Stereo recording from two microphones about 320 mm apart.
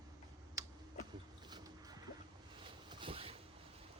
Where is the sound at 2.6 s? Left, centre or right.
Centre.